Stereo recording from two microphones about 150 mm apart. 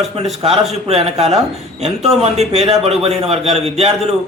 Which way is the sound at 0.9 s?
45° right (ahead or behind).